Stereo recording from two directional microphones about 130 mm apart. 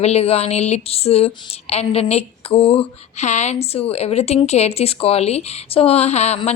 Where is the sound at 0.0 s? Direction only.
55° left (ahead or behind).